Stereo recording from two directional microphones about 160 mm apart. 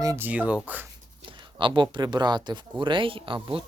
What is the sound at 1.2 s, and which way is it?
A woman's voice, 30° right (ahead or behind).